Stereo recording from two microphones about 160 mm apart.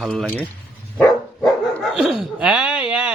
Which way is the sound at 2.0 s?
Centre (ahead or behind).